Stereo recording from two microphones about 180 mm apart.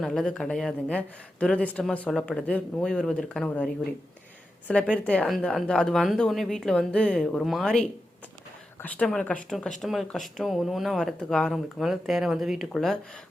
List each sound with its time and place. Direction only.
0.0 s speech: centre (ahead or behind)
4.7 s a woman's voice: 5° left (ahead or behind)